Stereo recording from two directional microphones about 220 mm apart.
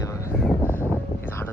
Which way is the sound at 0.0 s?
15° left (ahead or behind).